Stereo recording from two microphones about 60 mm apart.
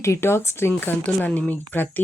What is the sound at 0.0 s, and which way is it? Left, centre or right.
Speech, left.